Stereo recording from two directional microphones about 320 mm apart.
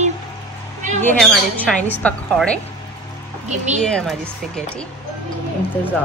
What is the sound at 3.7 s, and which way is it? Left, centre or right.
Speech, centre.